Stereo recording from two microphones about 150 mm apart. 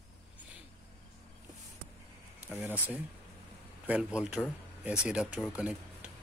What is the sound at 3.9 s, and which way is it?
Speech, 5° right (ahead or behind).